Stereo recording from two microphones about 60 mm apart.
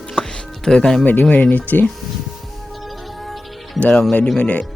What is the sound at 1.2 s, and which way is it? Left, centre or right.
Speech, left.